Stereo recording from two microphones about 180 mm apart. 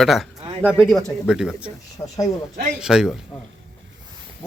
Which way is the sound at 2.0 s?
15° left (ahead or behind).